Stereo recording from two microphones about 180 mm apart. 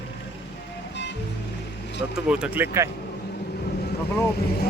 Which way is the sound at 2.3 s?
5° right (ahead or behind).